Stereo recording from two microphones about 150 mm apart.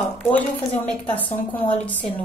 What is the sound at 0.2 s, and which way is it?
A woman's voice, 10° left (ahead or behind).